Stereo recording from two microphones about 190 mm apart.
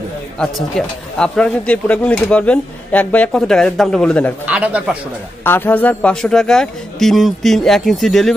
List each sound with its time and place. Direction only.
0.4 s speech: 5° left (ahead or behind)
4.5 s speech: 5° right (ahead or behind)
5.4 s speech: 10° left (ahead or behind)